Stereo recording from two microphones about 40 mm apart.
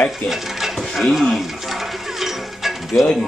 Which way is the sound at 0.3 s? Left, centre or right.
Centre.